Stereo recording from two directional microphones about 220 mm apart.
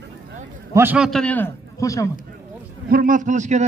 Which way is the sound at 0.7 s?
5° right (ahead or behind).